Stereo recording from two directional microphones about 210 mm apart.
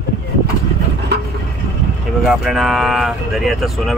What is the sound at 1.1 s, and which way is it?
Vehicle, 55° right (ahead or behind).